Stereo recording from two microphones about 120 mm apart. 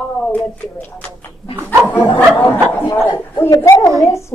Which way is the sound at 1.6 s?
25° right (ahead or behind).